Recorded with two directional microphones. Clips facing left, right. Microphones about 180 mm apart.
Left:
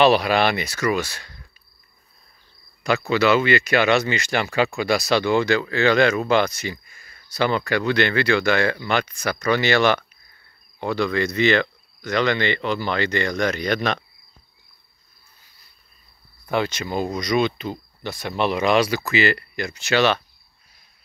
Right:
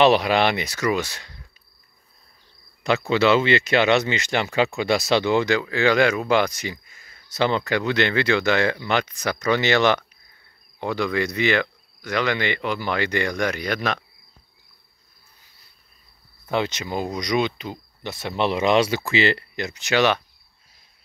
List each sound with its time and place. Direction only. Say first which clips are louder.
0.0 s speech: even; 20° right (ahead or behind)
2.8 s speech: even; 25° right (ahead or behind); by 13.9 s 5° right (ahead or behind)
16.4 s speech: left 1 dB; 20° right (ahead or behind)